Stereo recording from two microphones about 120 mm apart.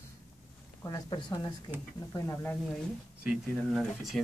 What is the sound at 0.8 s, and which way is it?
Speech, 35° left (ahead or behind).